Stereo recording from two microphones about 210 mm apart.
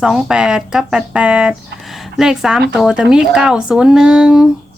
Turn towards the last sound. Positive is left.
turn(degrees=-5)  # may be behind; listen again after turning